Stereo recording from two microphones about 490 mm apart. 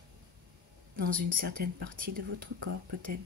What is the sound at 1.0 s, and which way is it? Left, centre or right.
Speech, centre.